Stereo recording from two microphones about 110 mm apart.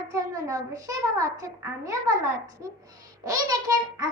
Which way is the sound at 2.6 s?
30° right (ahead or behind).